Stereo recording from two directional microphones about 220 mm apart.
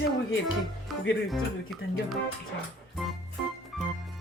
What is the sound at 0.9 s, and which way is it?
Music, centre (ahead or behind).